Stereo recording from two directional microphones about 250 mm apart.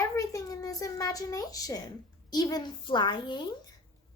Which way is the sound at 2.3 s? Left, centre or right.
Centre.